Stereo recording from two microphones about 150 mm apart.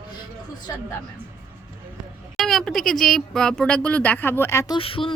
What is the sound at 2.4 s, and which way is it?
Speech, centre (ahead or behind).